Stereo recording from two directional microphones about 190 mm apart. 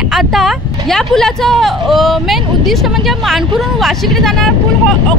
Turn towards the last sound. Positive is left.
turn(degrees=5)  # may be behind; listen again after turning